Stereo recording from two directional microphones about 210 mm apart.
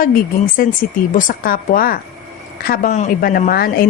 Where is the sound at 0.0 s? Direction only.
40° left (ahead or behind).